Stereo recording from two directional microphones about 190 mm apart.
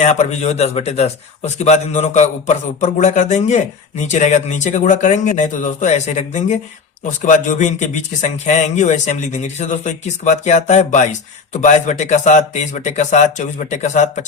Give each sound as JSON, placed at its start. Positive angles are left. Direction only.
{"t": 0.0, "sound": "a man's voice", "side_deg": 35}